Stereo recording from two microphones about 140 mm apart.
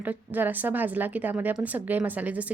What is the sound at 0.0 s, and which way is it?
A woman's voice, 10° right (ahead or behind).